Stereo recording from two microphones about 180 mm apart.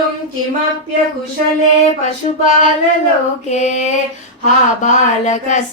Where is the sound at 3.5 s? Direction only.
40° left (ahead or behind).